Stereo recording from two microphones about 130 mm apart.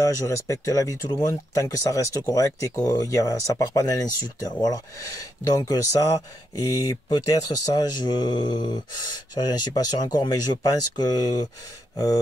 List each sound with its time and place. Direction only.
0.0 s speech: 25° left (ahead or behind)